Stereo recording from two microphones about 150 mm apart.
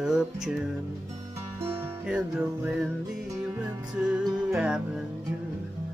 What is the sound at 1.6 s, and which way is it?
Music, 10° right (ahead or behind).